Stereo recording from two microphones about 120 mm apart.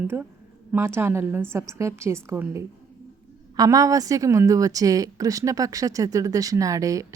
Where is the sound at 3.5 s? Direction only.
30° right (ahead or behind).